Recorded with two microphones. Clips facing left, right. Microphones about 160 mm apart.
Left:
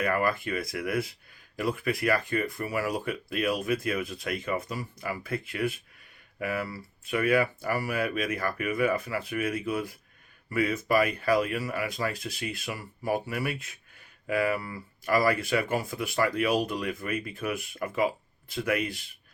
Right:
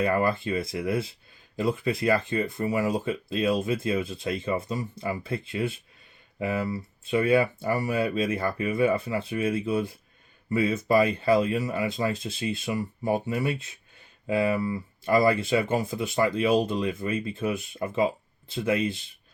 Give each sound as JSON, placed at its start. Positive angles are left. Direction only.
{"t": 0.0, "sound": "speech", "side_deg": -25}